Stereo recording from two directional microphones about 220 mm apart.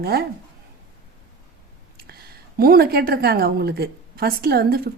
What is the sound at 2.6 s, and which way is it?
A woman's voice, 45° right (ahead or behind).